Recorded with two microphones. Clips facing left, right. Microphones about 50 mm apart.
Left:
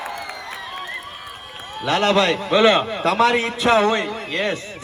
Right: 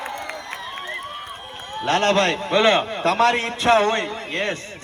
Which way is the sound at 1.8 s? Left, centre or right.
Right.